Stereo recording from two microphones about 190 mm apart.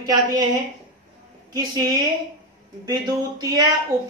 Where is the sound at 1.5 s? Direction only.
20° right (ahead or behind).